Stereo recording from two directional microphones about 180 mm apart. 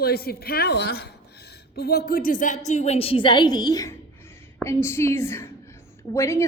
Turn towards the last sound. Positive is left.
turn(degrees=15)  # may be behind; listen again after turning